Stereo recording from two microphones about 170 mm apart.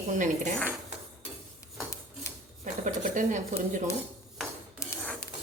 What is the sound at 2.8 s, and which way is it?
Speech, 50° right (ahead or behind).